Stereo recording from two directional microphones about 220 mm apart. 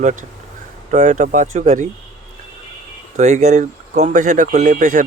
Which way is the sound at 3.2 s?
30° right (ahead or behind).